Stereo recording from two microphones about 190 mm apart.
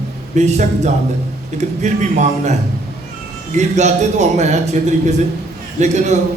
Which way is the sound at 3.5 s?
35° right (ahead or behind).